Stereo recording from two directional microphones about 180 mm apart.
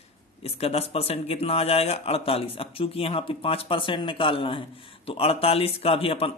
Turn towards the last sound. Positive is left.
turn(degrees=30)  # may be behind; listen again after turning